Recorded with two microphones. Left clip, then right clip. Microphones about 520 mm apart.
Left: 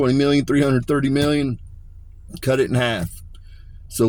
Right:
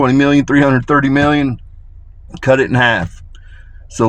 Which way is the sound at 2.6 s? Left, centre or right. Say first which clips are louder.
Right 8 dB; centre.